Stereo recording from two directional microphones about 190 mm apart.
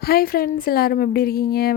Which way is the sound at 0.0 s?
50° left (ahead or behind).